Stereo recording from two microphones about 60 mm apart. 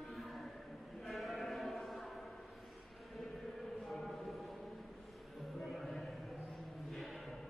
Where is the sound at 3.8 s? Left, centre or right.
Centre.